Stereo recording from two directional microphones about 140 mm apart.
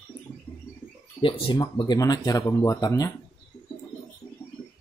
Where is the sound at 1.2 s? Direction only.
35° left (ahead or behind).